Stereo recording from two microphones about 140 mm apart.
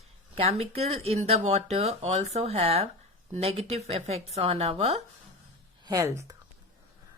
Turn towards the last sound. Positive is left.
turn(degrees=-20)  # may be behind; listen again after turning